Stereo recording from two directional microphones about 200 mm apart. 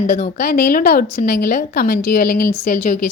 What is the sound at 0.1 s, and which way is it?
A woman's voice, 50° left (ahead or behind).